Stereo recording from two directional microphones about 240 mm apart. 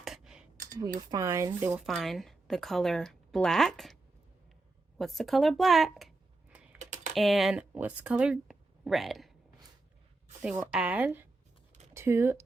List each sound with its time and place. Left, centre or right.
0.0 s a sound: centre
0.5 s a sound: right
0.8 s a woman's voice: centre
4.9 s speech: centre
6.7 s typing: right
7.2 s speech: centre
10.4 s a woman's voice: centre